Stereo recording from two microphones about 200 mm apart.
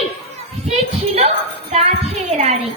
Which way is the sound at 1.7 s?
35° right (ahead or behind).